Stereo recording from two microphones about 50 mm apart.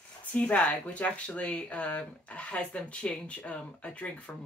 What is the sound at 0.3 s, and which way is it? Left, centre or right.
Speech, left.